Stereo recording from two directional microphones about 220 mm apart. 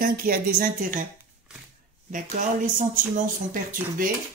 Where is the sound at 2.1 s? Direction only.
35° right (ahead or behind).